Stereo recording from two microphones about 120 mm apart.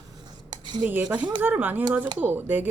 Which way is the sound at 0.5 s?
40° right (ahead or behind).